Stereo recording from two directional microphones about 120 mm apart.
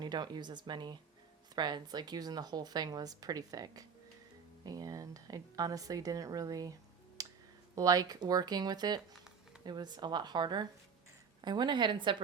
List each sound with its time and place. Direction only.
0.0 s a woman's voice: 35° right (ahead or behind)
7.2 s a sound: 30° right (ahead or behind)
7.8 s speech: 30° right (ahead or behind)